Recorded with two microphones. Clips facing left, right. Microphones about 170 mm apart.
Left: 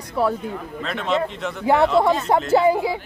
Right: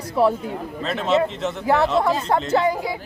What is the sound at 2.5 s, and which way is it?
Speech, 25° left (ahead or behind).